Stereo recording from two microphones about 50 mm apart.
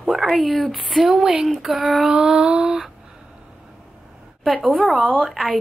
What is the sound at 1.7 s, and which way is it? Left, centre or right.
Female singing, centre.